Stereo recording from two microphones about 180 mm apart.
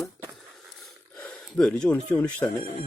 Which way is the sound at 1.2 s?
5° left (ahead or behind).